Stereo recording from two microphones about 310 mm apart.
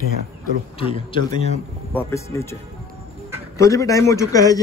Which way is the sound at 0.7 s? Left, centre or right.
Centre.